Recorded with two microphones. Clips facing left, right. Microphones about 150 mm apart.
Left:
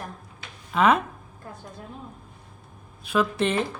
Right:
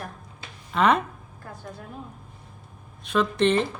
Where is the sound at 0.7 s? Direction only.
5° left (ahead or behind).